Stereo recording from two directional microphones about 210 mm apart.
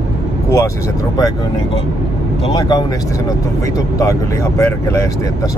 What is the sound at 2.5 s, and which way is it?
Speech, 20° left (ahead or behind).